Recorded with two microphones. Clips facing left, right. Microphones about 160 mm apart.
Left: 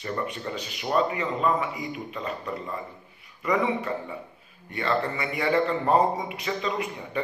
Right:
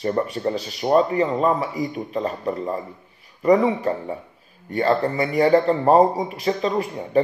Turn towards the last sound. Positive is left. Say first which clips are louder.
# right 10 dB
turn(degrees=-40)  # may be behind; listen again after turning